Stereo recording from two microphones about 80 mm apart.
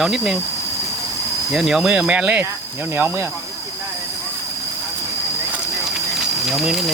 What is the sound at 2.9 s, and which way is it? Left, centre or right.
Speech, right.